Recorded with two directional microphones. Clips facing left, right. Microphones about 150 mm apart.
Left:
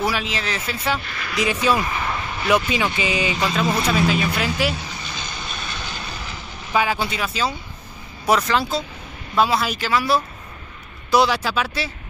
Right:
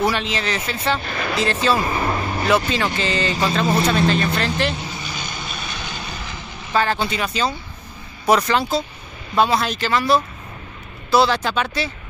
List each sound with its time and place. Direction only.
0.0 s speech: 5° left (ahead or behind)
1.0 s speech: 35° right (ahead or behind)
1.5 s speech: 10° left (ahead or behind)
1.9 s vehicle: 40° right (ahead or behind)
2.5 s speech: 10° left (ahead or behind)
5.1 s vehicle: 5° right (ahead or behind)
8.3 s speech: centre (ahead or behind)